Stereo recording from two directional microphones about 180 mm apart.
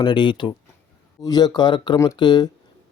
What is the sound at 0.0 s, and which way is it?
Speech, 25° left (ahead or behind).